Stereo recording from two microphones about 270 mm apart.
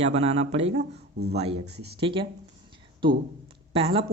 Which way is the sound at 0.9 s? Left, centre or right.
Right.